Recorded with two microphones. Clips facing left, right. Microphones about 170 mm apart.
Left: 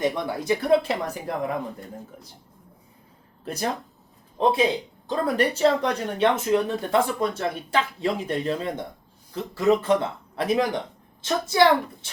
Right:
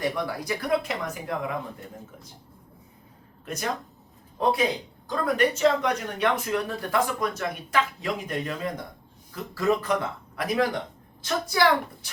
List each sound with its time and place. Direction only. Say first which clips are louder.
0.0 s speech: left 3 dB; 20° left (ahead or behind)
3.4 s speech: left 3 dB; 35° left (ahead or behind)